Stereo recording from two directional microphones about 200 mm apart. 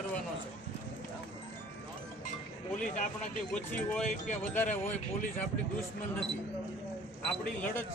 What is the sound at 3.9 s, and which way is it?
Speech, 5° left (ahead or behind).